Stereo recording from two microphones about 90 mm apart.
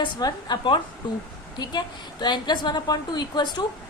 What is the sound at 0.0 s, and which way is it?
A woman's voice, 50° left (ahead or behind).